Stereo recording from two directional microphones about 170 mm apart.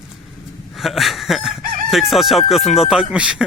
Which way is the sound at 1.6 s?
55° right (ahead or behind).